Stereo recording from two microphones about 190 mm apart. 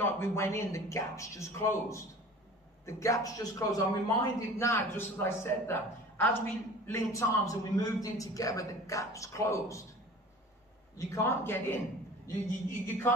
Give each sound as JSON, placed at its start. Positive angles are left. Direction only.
{"t": 0.0, "sound": "a man's voice", "side_deg": 15}
{"t": 6.9, "sound": "a man's voice", "side_deg": 15}
{"t": 11.0, "sound": "a man's voice", "side_deg": 15}